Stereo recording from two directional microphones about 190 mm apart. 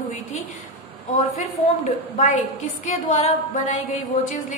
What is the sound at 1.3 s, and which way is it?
A woman's voice, 40° left (ahead or behind).